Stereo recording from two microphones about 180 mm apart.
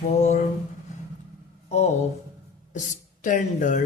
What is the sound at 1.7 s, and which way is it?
Speech, 40° left (ahead or behind).